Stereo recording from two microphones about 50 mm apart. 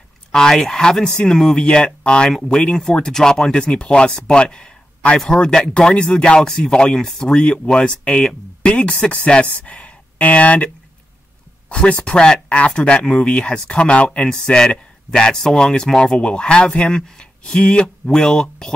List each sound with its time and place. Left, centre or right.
0.3 s speech: centre
7.1 s speech: centre
7.3 s speech: left
11.7 s speech: left